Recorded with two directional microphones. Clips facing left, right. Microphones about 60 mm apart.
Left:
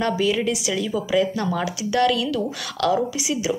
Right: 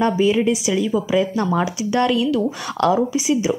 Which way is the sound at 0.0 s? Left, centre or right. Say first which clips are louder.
Right 4 dB; right.